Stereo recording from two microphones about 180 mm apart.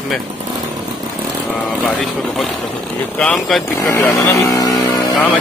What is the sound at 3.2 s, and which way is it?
Speech, 5° left (ahead or behind).